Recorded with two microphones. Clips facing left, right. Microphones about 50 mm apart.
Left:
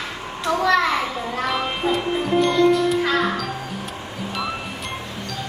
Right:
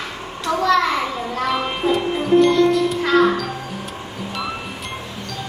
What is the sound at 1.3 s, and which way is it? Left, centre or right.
Music, centre.